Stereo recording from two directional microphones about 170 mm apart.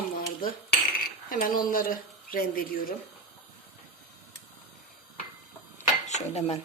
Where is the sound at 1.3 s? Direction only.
55° left (ahead or behind).